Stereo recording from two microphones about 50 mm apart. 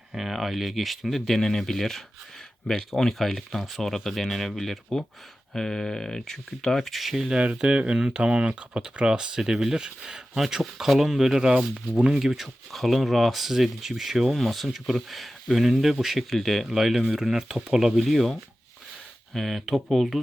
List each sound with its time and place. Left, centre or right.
0.1 s speech: centre
7.5 s speech: centre
12.2 s speech: centre